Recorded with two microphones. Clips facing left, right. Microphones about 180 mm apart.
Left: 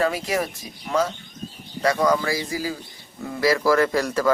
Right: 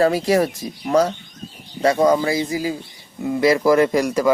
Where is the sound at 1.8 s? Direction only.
25° right (ahead or behind).